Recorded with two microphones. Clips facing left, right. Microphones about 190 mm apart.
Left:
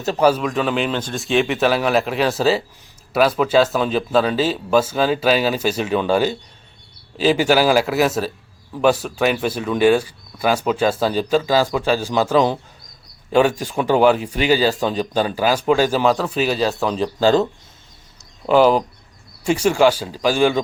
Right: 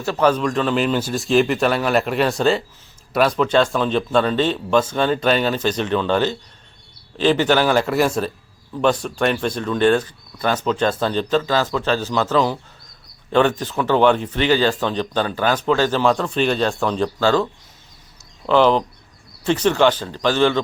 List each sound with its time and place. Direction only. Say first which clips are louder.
0.0 s speech: left 1 dB; 20° left (ahead or behind)
0.3 s speech: even; 5° left (ahead or behind)
17.2 s speech: left 4 dB; 20° left (ahead or behind)
18.4 s speech: left 1 dB; 10° left (ahead or behind)